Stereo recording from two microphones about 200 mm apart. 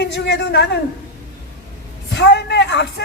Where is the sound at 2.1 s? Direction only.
55° left (ahead or behind).